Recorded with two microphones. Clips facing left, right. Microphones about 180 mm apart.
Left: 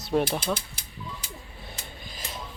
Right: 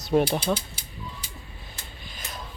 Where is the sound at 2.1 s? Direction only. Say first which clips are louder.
Even; 30° left (ahead or behind).